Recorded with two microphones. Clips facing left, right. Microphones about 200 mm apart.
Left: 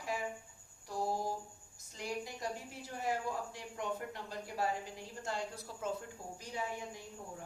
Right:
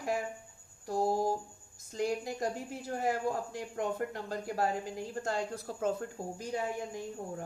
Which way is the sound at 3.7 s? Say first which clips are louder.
Right 6 dB; 45° right (ahead or behind).